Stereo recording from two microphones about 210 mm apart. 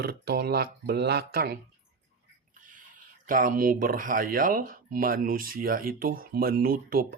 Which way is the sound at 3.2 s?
40° right (ahead or behind).